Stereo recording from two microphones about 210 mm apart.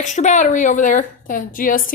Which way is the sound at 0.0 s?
35° left (ahead or behind).